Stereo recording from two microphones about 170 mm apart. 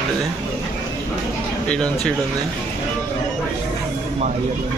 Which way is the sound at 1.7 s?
5° left (ahead or behind).